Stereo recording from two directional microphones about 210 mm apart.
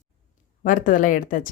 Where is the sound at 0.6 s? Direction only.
40° left (ahead or behind).